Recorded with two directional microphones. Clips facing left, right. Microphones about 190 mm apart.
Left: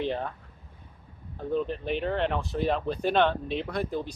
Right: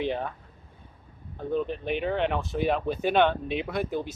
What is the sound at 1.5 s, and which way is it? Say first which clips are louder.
Speech: even; 5° right (ahead or behind).